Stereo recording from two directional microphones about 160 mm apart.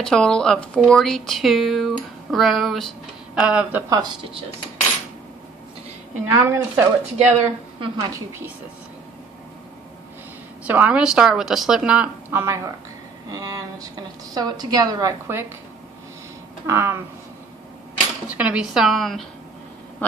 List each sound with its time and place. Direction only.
0.0 s a woman's voice: 5° left (ahead or behind)
3.9 s a woman's voice: 25° right (ahead or behind)
6.2 s a woman's voice: 15° right (ahead or behind)
7.2 s a woman's voice: 35° right (ahead or behind)
10.6 s a woman's voice: 10° right (ahead or behind)
16.6 s a woman's voice: 15° right (ahead or behind)
18.3 s speech: 5° right (ahead or behind)